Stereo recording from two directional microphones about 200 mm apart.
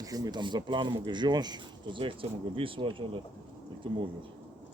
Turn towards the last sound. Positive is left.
turn(degrees=-25)  # may be behind; listen again after turning